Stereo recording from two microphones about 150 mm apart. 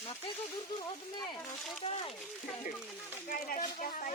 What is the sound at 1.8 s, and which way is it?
Speech, 40° left (ahead or behind).